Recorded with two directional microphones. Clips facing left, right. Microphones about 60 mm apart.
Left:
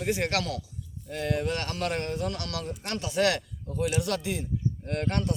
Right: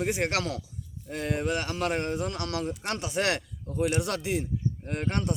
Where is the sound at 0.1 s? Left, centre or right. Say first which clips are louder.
Even; right.